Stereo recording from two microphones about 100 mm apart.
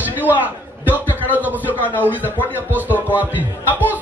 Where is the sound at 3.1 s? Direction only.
15° right (ahead or behind).